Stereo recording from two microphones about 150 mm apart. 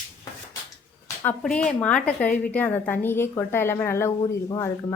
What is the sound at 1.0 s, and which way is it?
A woman's voice, 10° left (ahead or behind).